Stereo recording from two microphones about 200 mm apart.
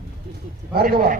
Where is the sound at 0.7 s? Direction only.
50° right (ahead or behind).